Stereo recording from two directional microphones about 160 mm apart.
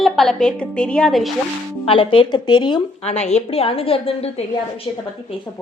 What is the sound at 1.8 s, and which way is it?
Speech, 35° left (ahead or behind).